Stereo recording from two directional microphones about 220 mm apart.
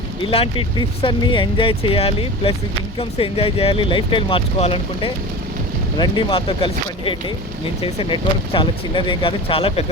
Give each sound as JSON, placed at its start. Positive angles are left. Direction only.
{"t": 0.3, "sound": "speech", "side_deg": 25}